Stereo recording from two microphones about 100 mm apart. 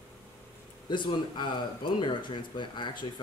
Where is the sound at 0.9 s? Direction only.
50° left (ahead or behind).